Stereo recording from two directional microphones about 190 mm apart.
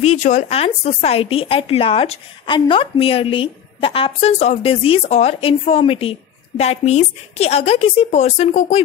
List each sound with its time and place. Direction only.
0.2 s speech: 35° left (ahead or behind)